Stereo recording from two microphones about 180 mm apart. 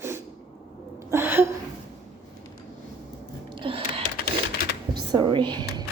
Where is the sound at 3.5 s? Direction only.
30° right (ahead or behind).